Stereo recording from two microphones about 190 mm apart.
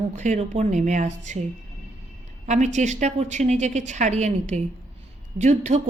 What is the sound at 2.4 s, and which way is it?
A woman's voice, 40° right (ahead or behind).